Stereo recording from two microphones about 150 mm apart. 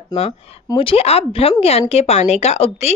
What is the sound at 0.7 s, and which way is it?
A woman's voice, 40° left (ahead or behind).